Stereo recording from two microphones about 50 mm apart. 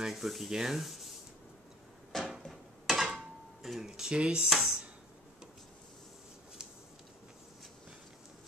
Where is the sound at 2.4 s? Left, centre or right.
Centre.